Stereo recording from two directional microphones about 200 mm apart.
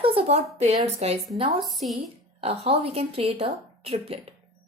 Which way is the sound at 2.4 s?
30° right (ahead or behind).